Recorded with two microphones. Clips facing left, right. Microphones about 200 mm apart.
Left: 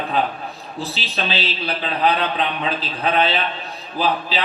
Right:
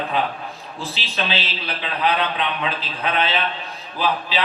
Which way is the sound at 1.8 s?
35° left (ahead or behind).